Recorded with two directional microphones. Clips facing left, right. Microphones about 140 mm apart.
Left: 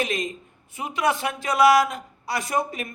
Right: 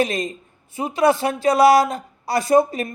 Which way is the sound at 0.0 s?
35° right (ahead or behind).